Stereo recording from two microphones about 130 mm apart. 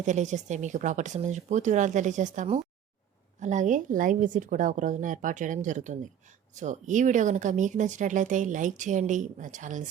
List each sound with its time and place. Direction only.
0.0 s speech: 65° right (ahead or behind)